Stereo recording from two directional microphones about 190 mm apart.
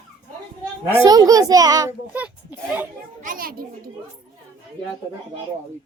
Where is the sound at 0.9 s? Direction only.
15° right (ahead or behind).